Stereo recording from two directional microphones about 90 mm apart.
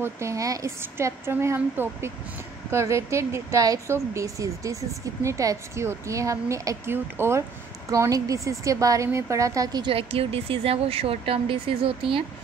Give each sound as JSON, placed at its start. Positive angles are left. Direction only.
{"t": 0.0, "sound": "speech", "side_deg": -35}
{"t": 6.9, "sound": "speech", "side_deg": -25}
{"t": 9.8, "sound": "speech", "side_deg": -90}